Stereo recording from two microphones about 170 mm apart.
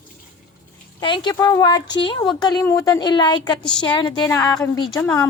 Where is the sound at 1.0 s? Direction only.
30° left (ahead or behind).